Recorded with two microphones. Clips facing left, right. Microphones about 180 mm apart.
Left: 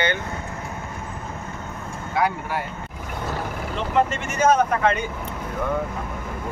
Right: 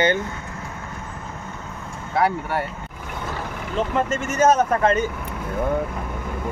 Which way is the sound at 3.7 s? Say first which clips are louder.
Even; 40° right (ahead or behind).